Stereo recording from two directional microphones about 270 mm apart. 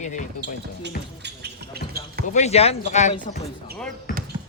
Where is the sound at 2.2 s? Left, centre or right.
Left.